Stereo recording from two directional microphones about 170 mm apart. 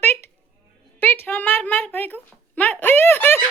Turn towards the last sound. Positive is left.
turn(degrees=15)  # may be behind; listen again after turning